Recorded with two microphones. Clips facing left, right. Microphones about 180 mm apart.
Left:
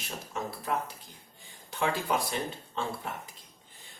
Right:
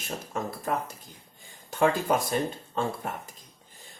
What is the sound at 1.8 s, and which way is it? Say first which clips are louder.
Speech: right 5 dB; 45° right (ahead or behind).